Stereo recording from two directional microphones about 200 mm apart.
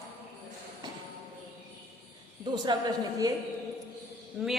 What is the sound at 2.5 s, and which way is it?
Speech, 20° right (ahead or behind).